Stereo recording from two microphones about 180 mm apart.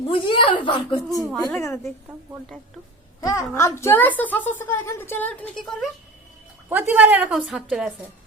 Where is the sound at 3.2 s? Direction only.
15° left (ahead or behind).